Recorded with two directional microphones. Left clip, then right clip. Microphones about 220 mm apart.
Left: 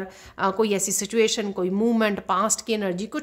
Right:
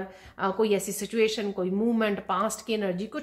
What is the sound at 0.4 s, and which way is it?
A woman's voice, 40° left (ahead or behind).